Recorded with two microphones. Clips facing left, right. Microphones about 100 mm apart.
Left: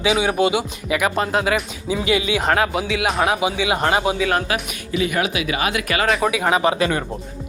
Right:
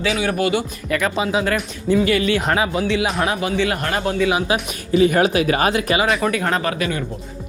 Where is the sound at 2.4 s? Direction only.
Centre (ahead or behind).